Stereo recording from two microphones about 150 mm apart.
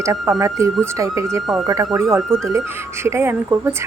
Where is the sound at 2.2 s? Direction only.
5° left (ahead or behind).